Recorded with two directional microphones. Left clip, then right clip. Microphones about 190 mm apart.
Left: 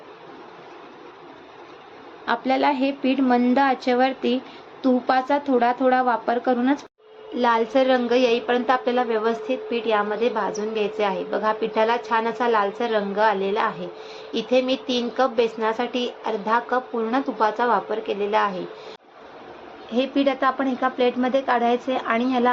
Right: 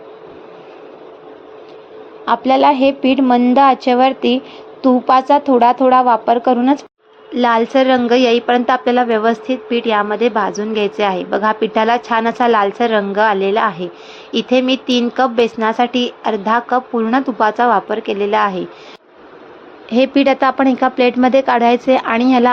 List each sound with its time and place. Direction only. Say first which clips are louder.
2.2 s a woman's voice: right 9 dB; 35° right (ahead or behind)
7.3 s a woman's voice: right 7 dB; 45° right (ahead or behind)
19.9 s a woman's voice: right 9 dB; 55° right (ahead or behind)